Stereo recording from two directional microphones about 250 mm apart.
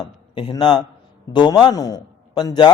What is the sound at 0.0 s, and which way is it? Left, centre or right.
A man's voice, centre.